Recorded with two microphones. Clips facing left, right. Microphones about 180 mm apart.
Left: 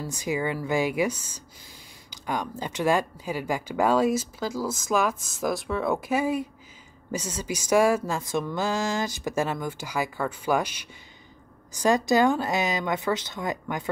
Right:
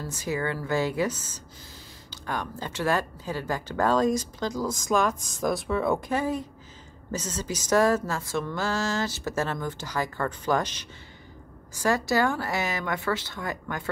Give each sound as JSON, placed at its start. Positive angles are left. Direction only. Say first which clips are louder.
{"t": 0.0, "sound": "speech", "louder": "left 2 dB", "side_deg": 15}